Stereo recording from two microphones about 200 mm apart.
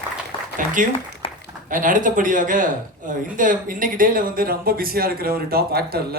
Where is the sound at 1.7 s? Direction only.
40° right (ahead or behind).